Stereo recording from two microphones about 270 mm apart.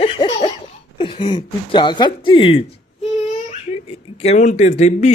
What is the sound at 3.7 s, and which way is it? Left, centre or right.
Speech, left.